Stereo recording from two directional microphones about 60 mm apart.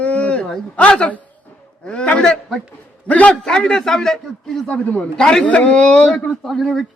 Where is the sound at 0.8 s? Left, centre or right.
Centre.